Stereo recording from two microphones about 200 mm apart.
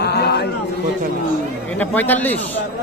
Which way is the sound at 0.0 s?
55° left (ahead or behind).